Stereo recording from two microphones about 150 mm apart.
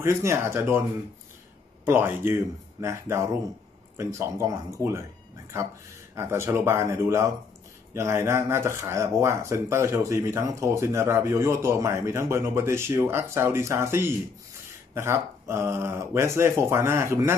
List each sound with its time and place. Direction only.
0.0 s speech: 15° right (ahead or behind)
1.9 s speech: 15° right (ahead or behind)
6.1 s speech: 15° right (ahead or behind)